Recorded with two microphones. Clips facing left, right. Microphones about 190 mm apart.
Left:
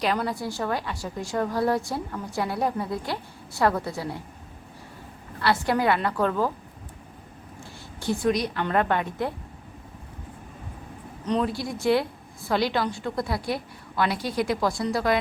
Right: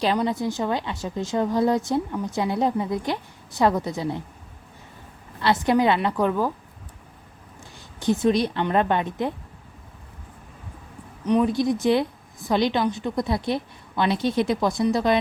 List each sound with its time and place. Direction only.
0.2 s a woman's voice: 20° right (ahead or behind)
5.4 s a woman's voice: 20° right (ahead or behind)
7.9 s a woman's voice: 20° right (ahead or behind)
11.3 s a woman's voice: 15° right (ahead or behind)